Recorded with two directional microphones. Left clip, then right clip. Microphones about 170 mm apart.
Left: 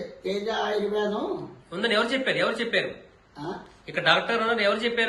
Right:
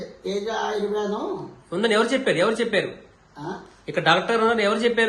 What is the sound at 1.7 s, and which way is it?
A man's voice, 40° right (ahead or behind).